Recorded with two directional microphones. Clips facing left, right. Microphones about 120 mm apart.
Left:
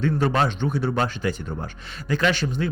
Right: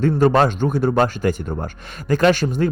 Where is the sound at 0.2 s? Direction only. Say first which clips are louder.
Right 7 dB; 45° right (ahead or behind).